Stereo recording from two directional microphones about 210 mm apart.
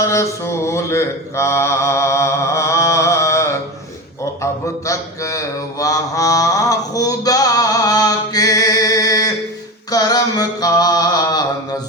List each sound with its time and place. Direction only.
0.0 s mantra: 15° left (ahead or behind)
4.9 s mantra: 15° left (ahead or behind)
9.9 s a sound: 15° left (ahead or behind)